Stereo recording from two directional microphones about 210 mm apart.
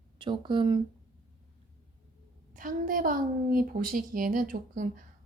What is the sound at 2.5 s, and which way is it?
A woman's voice, 40° right (ahead or behind).